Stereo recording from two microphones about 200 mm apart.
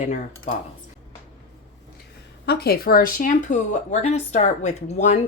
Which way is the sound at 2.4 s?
50° left (ahead or behind).